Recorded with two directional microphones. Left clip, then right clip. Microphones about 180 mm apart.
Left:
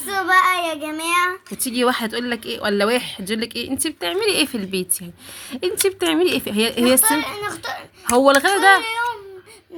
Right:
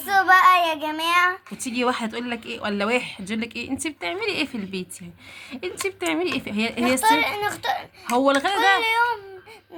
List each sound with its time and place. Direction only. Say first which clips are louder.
0.1 s child singing: right 1 dB; 15° right (ahead or behind)
1.6 s a woman's voice: left 4 dB; 20° left (ahead or behind)
7.0 s a child's voice: right 2 dB; 20° right (ahead or behind)
8.0 s speech: left 6 dB; 30° left (ahead or behind)
8.8 s a child's voice: right 2 dB; 20° right (ahead or behind)